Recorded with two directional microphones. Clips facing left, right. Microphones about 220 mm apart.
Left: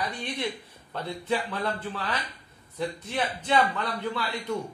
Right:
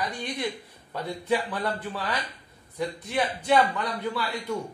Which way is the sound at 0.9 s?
15° right (ahead or behind).